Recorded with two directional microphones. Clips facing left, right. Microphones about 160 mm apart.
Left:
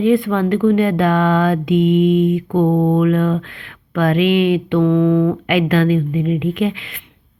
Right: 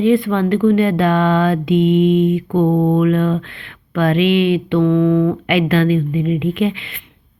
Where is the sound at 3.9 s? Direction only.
5° left (ahead or behind).